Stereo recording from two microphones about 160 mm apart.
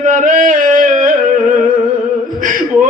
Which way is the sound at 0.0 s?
55° right (ahead or behind).